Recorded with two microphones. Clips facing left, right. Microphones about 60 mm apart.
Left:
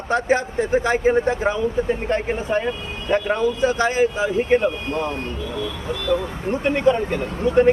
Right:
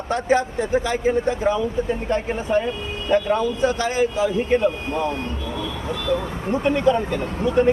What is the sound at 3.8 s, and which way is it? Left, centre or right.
Speech, left.